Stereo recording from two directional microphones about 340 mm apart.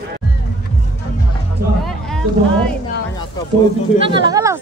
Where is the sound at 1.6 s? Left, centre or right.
Right.